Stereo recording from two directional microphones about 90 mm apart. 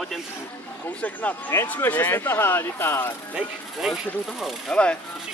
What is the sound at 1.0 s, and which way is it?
Speech, 15° left (ahead or behind).